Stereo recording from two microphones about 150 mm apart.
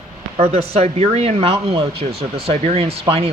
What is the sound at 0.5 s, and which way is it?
Speech, 40° right (ahead or behind).